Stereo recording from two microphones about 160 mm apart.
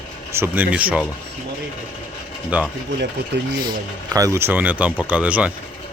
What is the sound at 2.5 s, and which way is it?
Speech, 10° right (ahead or behind).